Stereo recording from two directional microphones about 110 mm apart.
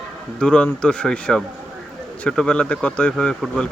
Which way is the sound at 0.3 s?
10° left (ahead or behind).